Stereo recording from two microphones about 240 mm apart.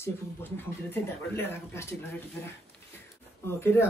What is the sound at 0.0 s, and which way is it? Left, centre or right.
Speech, centre.